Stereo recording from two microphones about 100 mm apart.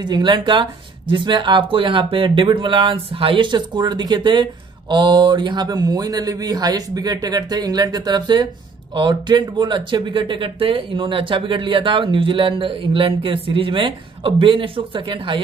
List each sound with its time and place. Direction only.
0.0 s speech: 50° right (ahead or behind)